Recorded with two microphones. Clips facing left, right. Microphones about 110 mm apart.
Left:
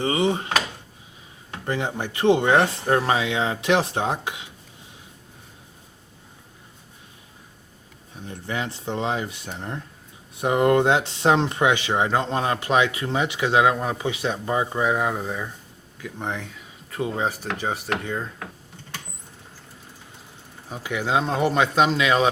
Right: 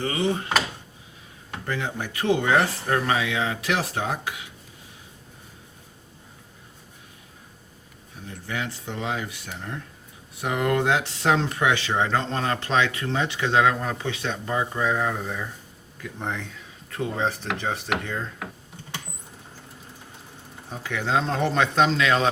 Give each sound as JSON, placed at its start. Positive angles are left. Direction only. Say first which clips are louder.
{"t": 0.0, "sound": "speech", "louder": "left 3 dB", "side_deg": 20}
{"t": 1.6, "sound": "speech", "louder": "left 3 dB", "side_deg": 20}
{"t": 8.3, "sound": "speech", "louder": "left 2 dB", "side_deg": 25}
{"t": 16.0, "sound": "speech", "louder": "left 1 dB", "side_deg": 0}
{"t": 17.6, "sound": "a sound", "louder": "left 2 dB", "side_deg": 5}
{"t": 20.7, "sound": "speech", "louder": "left 2 dB", "side_deg": 10}